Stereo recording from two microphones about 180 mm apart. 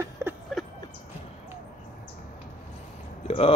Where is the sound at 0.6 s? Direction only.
Centre (ahead or behind).